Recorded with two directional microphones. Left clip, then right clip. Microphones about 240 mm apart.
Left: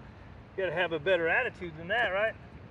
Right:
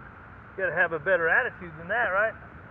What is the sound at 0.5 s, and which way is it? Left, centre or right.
Speech, left.